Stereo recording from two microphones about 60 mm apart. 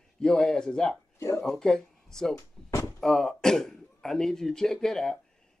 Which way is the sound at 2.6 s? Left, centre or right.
Left.